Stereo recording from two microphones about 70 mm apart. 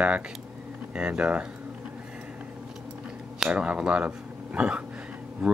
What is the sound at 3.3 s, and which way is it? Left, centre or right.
Speech, centre.